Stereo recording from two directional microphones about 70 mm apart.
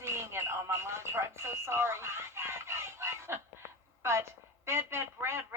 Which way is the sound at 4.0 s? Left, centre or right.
Right.